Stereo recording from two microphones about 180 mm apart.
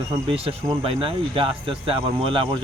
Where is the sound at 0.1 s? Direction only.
30° right (ahead or behind).